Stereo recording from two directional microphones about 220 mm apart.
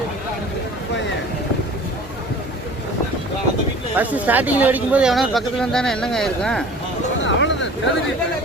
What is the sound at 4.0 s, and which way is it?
Speech, 5° right (ahead or behind).